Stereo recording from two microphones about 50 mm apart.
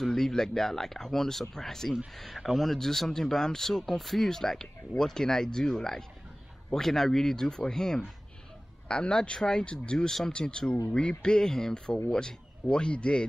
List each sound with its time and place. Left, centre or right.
0.0 s speech: centre